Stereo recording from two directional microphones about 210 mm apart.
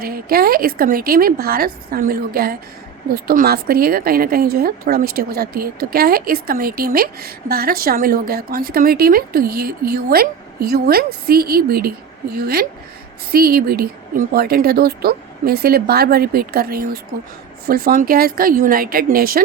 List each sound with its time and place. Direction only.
0.0 s a woman's voice: 45° right (ahead or behind)